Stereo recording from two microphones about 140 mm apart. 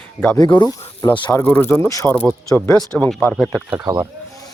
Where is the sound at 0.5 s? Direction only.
25° left (ahead or behind).